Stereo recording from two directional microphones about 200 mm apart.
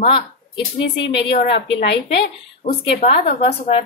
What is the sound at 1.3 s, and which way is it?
Speech, 30° left (ahead or behind).